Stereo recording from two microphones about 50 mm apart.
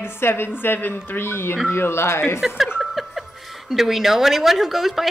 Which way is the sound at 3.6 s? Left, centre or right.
Centre.